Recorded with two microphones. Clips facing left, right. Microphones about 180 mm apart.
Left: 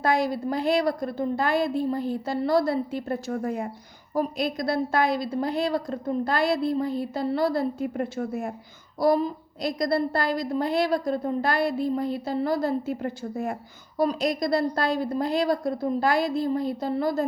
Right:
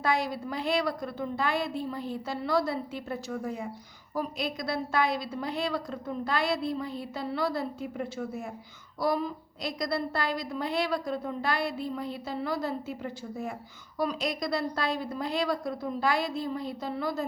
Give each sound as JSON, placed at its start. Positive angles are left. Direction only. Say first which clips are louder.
{"t": 0.0, "sound": "a woman's voice", "louder": "left 5 dB", "side_deg": 40}
{"t": 4.1, "sound": "a woman's voice", "louder": "left 6 dB", "side_deg": 45}
{"t": 9.0, "sound": "a woman's voice", "louder": "left 7 dB", "side_deg": 35}
{"t": 14.0, "sound": "a woman's voice", "louder": "left 6 dB", "side_deg": 40}